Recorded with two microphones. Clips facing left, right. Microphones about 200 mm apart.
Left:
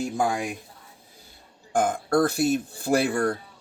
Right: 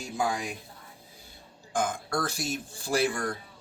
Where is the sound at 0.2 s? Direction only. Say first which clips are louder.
Left 3 dB; 50° left (ahead or behind).